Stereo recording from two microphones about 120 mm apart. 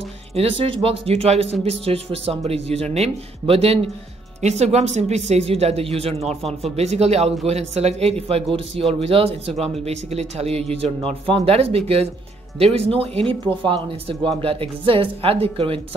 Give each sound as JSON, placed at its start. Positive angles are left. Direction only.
{"t": 0.3, "sound": "speech", "side_deg": -55}
{"t": 4.4, "sound": "speech", "side_deg": -70}
{"t": 13.3, "sound": "speech", "side_deg": -45}